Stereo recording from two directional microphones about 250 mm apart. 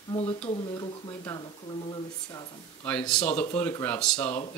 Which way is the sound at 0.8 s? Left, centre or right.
Centre.